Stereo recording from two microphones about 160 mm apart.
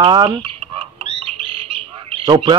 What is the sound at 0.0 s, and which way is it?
Speech, 30° right (ahead or behind).